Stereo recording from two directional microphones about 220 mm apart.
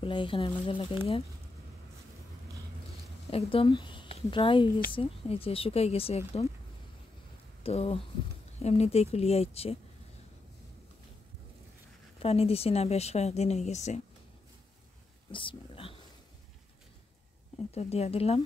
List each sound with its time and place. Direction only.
0.0 s speech: 25° left (ahead or behind)
3.3 s speech: 25° left (ahead or behind)
7.6 s speech: 25° left (ahead or behind)
12.2 s speech: 25° left (ahead or behind)
15.3 s a sound: 25° left (ahead or behind)
17.7 s speech: 30° left (ahead or behind)